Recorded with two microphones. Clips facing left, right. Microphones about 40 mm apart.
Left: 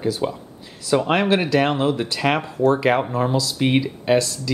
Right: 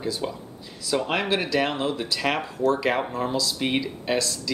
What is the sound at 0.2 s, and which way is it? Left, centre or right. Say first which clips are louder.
Speech: left 6 dB; centre.